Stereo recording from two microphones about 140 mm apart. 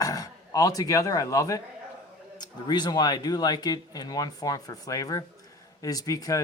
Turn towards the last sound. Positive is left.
turn(degrees=25)  # may be behind; listen again after turning